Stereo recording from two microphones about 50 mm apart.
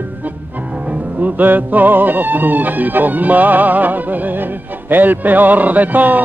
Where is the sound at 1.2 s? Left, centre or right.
Right.